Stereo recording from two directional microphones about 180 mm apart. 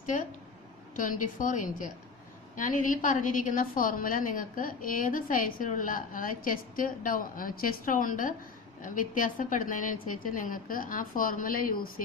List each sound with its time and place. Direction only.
0.0 s a woman's voice: 45° left (ahead or behind)